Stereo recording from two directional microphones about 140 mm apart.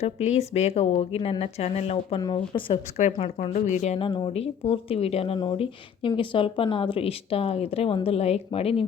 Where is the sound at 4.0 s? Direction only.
35° left (ahead or behind).